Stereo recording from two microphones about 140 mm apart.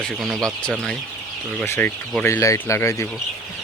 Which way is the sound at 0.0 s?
5° left (ahead or behind).